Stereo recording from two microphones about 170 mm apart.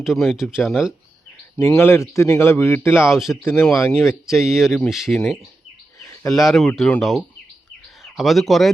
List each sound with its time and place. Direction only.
0.0 s speech: centre (ahead or behind)
1.5 s a man's voice: 15° left (ahead or behind)
2.9 s speech: 5° right (ahead or behind)
3.4 s a man's voice: 15° left (ahead or behind)
4.3 s speech: centre (ahead or behind)
6.0 s bird: 20° left (ahead or behind)
6.3 s speech: centre (ahead or behind)